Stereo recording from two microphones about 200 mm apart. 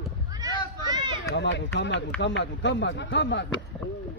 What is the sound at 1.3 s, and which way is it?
Speech, 65° left (ahead or behind).